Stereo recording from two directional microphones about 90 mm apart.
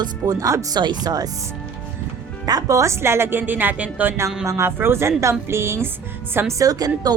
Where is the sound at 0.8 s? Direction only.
50° right (ahead or behind).